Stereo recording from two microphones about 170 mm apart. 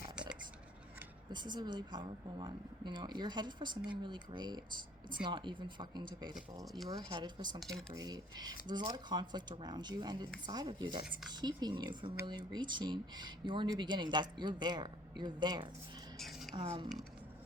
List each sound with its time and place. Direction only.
0.2 s whispering: 5° right (ahead or behind)
1.3 s speech: 25° right (ahead or behind)
7.6 s speech: centre (ahead or behind)
7.9 s speech: 20° right (ahead or behind)
16.1 s speech: centre (ahead or behind)
16.6 s speech: 30° right (ahead or behind)